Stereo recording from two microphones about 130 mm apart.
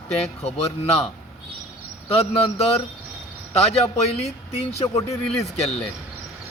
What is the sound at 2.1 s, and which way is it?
Speech, 50° left (ahead or behind).